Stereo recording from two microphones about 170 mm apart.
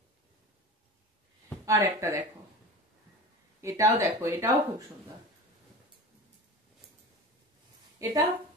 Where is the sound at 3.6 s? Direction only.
20° right (ahead or behind).